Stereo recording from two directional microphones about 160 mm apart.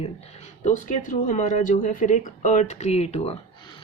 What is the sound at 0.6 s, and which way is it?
Speech, 50° left (ahead or behind).